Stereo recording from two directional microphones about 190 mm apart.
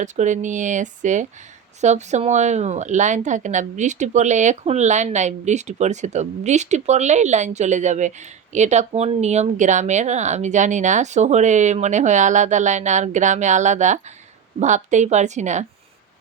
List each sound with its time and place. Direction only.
0.0 s speech: 40° right (ahead or behind)